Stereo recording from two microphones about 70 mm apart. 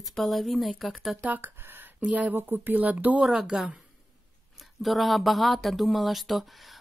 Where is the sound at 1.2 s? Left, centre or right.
Right.